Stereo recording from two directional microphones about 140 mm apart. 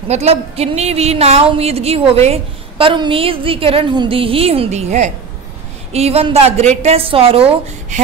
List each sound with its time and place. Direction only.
0.1 s speech: 50° right (ahead or behind)